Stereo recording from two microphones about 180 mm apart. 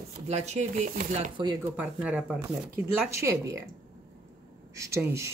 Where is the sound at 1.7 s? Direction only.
5° right (ahead or behind).